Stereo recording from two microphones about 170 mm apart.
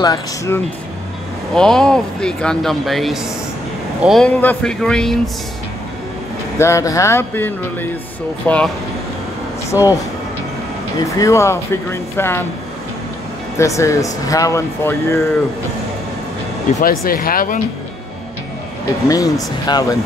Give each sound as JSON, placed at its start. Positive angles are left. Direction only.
{"t": 0.0, "sound": "speech", "side_deg": 20}
{"t": 1.5, "sound": "speech", "side_deg": 5}
{"t": 6.6, "sound": "speech", "side_deg": 20}
{"t": 9.7, "sound": "speech", "side_deg": 20}
{"t": 11.1, "sound": "speech", "side_deg": 20}
{"t": 13.6, "sound": "speech", "side_deg": 15}
{"t": 16.8, "sound": "speech", "side_deg": 60}
{"t": 19.0, "sound": "speech", "side_deg": 20}